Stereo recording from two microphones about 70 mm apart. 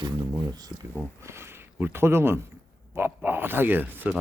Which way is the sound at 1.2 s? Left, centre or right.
Right.